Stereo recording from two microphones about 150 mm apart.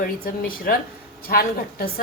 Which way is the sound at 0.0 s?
75° left (ahead or behind).